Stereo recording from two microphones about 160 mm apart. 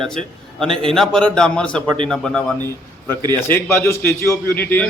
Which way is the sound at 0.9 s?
5° left (ahead or behind).